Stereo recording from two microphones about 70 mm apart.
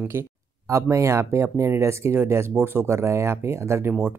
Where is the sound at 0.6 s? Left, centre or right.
Right.